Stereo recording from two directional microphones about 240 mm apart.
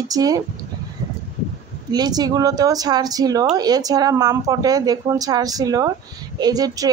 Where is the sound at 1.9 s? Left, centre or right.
Centre.